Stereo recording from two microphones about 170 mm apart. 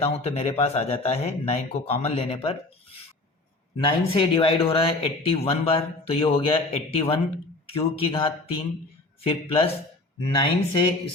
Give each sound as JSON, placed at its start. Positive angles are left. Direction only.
{"t": 0.0, "sound": "speech", "side_deg": 40}
{"t": 3.8, "sound": "speech", "side_deg": 30}